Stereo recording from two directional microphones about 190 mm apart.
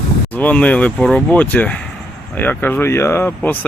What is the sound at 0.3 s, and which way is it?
Speech, 10° left (ahead or behind).